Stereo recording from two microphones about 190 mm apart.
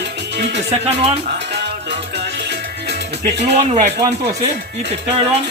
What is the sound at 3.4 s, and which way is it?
Speech, 35° right (ahead or behind).